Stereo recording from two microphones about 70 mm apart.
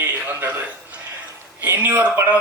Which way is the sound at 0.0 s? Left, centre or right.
Right.